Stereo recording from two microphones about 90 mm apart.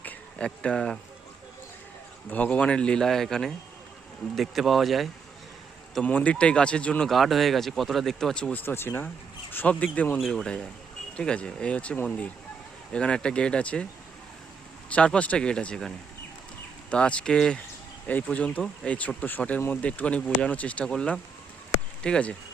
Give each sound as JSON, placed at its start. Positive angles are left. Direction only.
{"t": 0.0, "sound": "a sound", "side_deg": 15}
{"t": 2.3, "sound": "speech", "side_deg": 15}
{"t": 5.9, "sound": "speech", "side_deg": 10}
{"t": 7.1, "sound": "speech", "side_deg": 0}
{"t": 8.5, "sound": "speech", "side_deg": 25}
{"t": 14.8, "sound": "speech", "side_deg": 15}
{"t": 16.9, "sound": "speech", "side_deg": 10}